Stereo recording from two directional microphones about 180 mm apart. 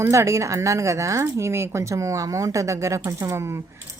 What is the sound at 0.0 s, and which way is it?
Speech, 15° right (ahead or behind).